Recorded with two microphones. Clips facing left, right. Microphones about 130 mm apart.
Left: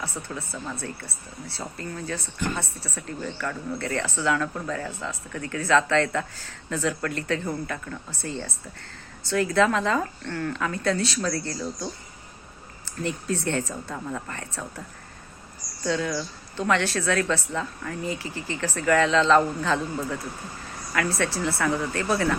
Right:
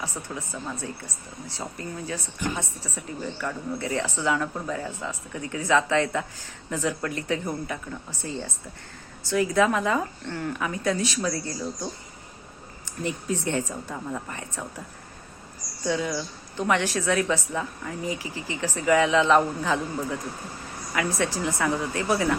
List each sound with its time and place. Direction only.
0.0 s speech: 15° right (ahead or behind)
15.8 s speech: 10° right (ahead or behind)